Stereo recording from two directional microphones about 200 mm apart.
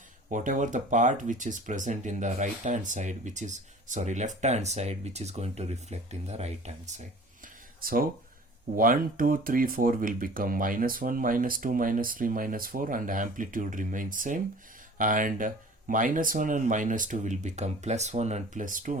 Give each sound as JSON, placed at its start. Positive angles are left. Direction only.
{"t": 0.3, "sound": "speech", "side_deg": -40}
{"t": 7.8, "sound": "speech", "side_deg": -45}